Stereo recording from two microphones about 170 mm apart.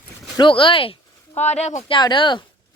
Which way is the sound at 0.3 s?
30° left (ahead or behind).